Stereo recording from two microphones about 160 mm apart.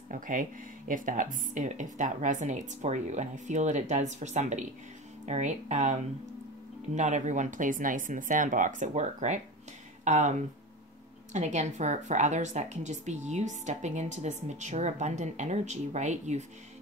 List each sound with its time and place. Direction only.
0.1 s a woman's voice: 55° right (ahead or behind)
7.0 s a woman's voice: 50° right (ahead or behind)
11.3 s a woman's voice: 45° right (ahead or behind)